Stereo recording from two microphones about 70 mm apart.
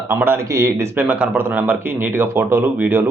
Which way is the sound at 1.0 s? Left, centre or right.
Right.